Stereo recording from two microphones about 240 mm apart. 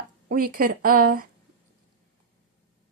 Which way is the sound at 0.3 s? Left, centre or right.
Right.